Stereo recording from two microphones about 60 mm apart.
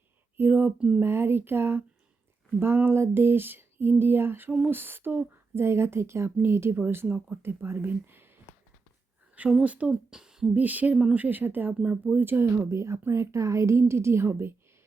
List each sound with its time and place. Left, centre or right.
0.3 s speech: right
9.6 s speech: centre
10.5 s speech: right
12.7 s speech: right